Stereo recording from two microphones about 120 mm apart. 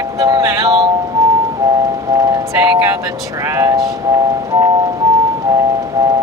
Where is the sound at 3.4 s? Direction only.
25° right (ahead or behind).